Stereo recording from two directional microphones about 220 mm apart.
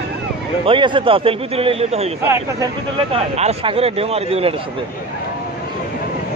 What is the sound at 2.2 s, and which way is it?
Speech, 15° right (ahead or behind).